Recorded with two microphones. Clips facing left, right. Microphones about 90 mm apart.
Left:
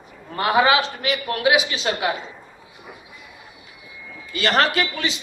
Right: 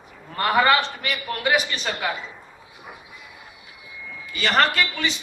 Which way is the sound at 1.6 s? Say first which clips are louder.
Left 2 dB; 90° left.